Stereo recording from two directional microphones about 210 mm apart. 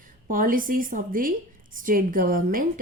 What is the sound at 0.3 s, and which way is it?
A woman's voice, 40° right (ahead or behind).